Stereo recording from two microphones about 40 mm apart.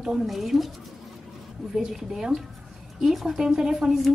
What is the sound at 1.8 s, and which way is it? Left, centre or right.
Speech, centre.